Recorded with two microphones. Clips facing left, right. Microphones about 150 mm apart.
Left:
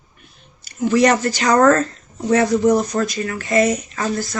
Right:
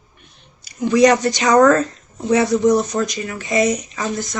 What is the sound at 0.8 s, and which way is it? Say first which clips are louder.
Speech: right 2 dB; 15° right (ahead or behind).